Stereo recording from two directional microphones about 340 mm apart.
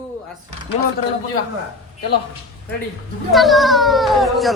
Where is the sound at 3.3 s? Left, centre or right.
Centre.